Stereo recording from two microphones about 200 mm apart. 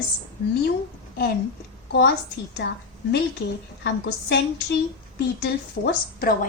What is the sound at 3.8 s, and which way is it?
A woman's voice, 55° left (ahead or behind).